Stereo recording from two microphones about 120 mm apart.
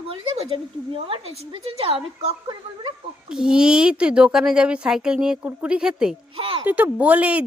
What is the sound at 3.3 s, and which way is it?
A woman's voice, 5° right (ahead or behind).